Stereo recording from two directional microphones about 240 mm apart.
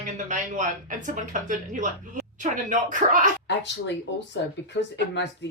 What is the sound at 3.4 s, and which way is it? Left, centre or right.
Speech, left.